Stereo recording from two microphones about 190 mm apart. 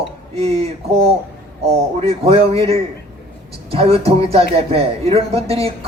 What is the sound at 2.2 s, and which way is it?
A man's voice, 30° right (ahead or behind).